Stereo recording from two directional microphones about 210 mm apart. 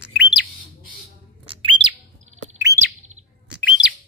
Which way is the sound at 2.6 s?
15° right (ahead or behind).